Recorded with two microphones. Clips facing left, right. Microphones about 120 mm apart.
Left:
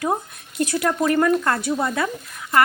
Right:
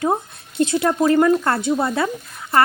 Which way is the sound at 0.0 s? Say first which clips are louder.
Right 3 dB; 25° right (ahead or behind).